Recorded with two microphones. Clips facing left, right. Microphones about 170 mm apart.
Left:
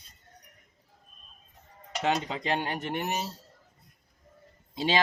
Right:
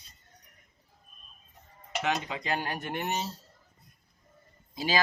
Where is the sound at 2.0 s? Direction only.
30° left (ahead or behind).